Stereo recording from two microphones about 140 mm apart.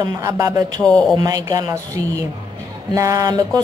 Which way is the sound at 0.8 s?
5° left (ahead or behind).